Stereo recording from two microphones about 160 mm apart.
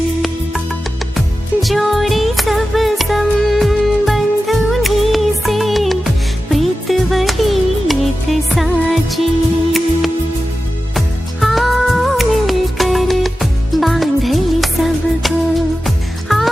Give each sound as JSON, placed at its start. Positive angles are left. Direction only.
{"t": 1.6, "sound": "music", "side_deg": 0}
{"t": 10.9, "sound": "music", "side_deg": 0}